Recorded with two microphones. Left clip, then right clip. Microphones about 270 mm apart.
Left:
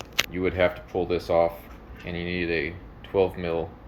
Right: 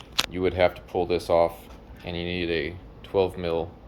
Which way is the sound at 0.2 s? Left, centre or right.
Centre.